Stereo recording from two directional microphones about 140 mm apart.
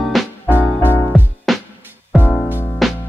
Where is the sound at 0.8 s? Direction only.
20° left (ahead or behind).